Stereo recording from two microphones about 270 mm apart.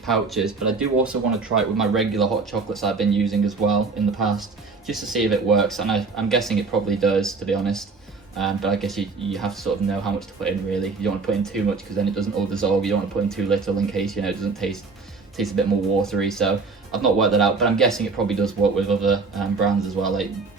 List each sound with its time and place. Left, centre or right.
0.0 s speech: centre
4.9 s speech: centre